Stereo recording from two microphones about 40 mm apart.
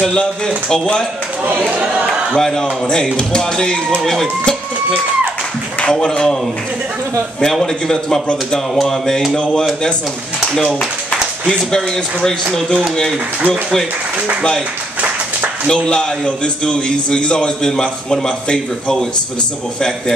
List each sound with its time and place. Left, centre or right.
1.5 s speech: right
2.0 s a man's voice: centre
4.0 s speech: centre
5.9 s speech: centre
7.6 s speech: centre
10.5 s speech: centre
15.6 s a man's voice: centre